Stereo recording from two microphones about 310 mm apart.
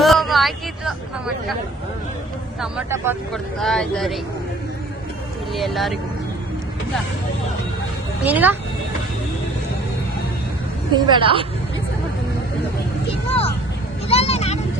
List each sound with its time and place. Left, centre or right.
0.0 s vehicle: centre
2.6 s speech: centre
5.5 s speech: centre
8.2 s speech: centre
10.9 s a woman's voice: centre
13.2 s a sound: centre